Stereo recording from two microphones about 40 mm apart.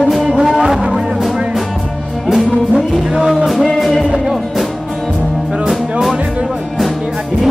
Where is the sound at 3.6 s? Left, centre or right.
Centre.